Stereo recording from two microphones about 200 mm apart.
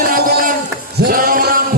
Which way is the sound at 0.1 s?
45° right (ahead or behind).